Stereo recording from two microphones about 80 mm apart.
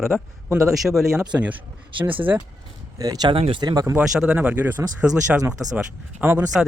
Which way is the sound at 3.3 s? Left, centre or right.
Right.